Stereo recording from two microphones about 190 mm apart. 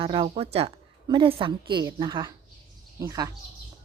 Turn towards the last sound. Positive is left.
turn(degrees=-15)  # may be behind; listen again after turning